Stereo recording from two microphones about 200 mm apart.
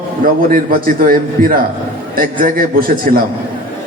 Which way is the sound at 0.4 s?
45° right (ahead or behind).